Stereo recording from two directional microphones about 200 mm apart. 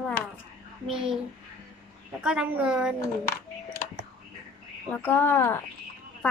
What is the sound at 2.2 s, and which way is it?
Speech, 5° right (ahead or behind).